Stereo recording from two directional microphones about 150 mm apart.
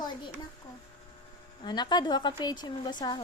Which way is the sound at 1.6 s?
30° left (ahead or behind).